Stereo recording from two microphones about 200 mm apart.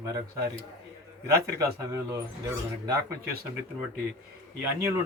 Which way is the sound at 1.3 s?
15° right (ahead or behind).